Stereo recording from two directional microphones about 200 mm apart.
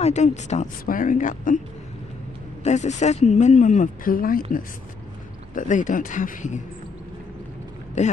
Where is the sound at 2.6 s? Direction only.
35° left (ahead or behind).